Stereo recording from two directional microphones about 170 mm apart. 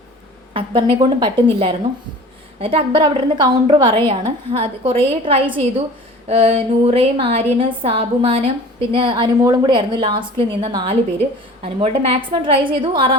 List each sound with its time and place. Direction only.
0.5 s a woman's voice: 30° right (ahead or behind)
2.6 s a woman's voice: 35° right (ahead or behind)